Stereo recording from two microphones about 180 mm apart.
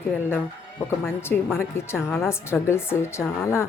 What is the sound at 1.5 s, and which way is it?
Speech, 15° left (ahead or behind).